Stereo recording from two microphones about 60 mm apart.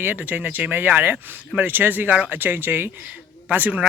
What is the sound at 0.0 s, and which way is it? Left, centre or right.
Speech, right.